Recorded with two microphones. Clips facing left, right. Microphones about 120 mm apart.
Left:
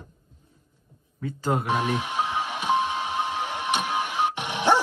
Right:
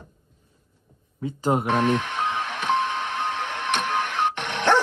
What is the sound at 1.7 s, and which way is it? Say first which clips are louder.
Music: right 3 dB; 5° left (ahead or behind).